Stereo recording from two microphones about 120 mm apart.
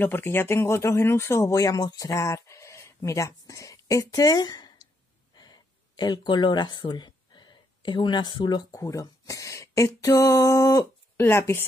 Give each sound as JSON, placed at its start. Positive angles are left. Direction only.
{"t": 0.0, "sound": "speech", "side_deg": 20}